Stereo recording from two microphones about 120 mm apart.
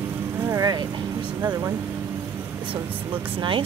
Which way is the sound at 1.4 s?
30° right (ahead or behind).